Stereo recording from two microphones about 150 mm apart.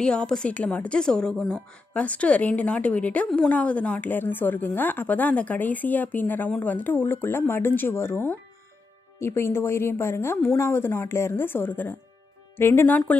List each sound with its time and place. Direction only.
0.0 s a woman's voice: 5° left (ahead or behind)